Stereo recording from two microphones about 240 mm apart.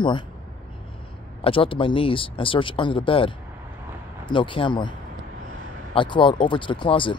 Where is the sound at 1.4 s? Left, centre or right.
Left.